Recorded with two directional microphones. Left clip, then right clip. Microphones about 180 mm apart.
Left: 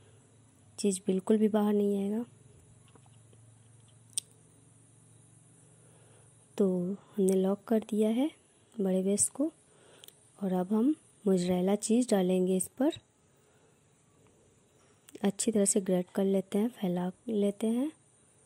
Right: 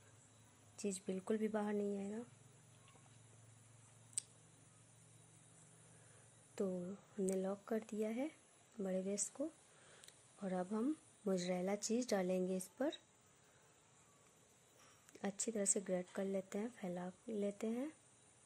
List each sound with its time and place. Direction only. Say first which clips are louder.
0.7 s speech: left 14 dB; 25° left (ahead or behind)
6.5 s speech: left 13 dB; 30° left (ahead or behind)
15.0 s speech: left 13 dB; 30° left (ahead or behind)